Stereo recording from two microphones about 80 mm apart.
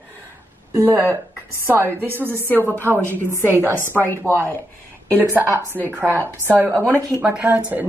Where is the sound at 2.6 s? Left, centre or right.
Left.